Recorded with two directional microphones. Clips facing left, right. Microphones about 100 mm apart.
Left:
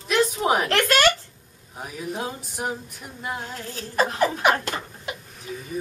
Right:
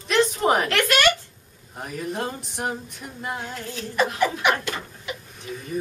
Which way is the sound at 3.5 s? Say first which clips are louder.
Even; 35° left (ahead or behind).